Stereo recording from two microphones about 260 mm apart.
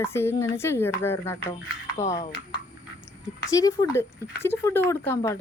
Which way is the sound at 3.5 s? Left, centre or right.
Centre.